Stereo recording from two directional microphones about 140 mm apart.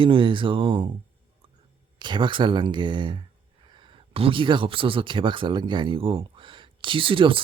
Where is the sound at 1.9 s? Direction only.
35° right (ahead or behind).